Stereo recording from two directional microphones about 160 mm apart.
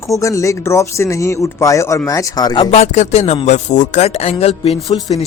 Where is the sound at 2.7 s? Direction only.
45° left (ahead or behind).